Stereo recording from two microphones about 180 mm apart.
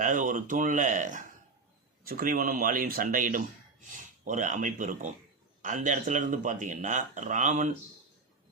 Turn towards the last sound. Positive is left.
turn(degrees=-45)  # may be behind; listen again after turning